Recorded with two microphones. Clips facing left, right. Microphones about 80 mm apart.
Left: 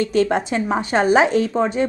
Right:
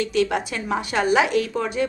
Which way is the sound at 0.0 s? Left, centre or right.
Left.